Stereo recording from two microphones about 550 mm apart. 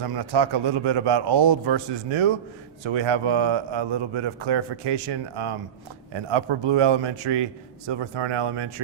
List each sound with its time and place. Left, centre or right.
0.1 s a man's voice: right